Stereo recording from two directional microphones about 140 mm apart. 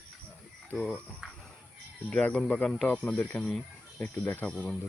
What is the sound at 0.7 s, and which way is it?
Speech, 5° left (ahead or behind).